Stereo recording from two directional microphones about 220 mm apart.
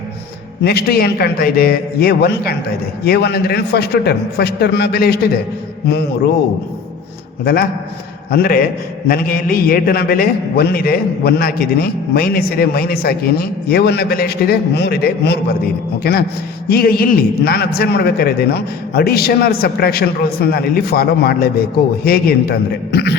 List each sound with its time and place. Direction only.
0.6 s a man's voice: 45° left (ahead or behind)
7.4 s a man's voice: 45° left (ahead or behind)